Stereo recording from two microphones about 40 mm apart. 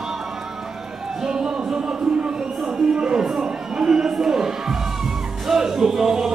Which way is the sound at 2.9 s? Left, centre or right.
Right.